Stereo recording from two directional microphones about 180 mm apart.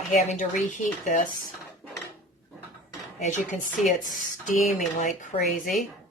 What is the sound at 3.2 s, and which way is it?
Speech, 40° left (ahead or behind).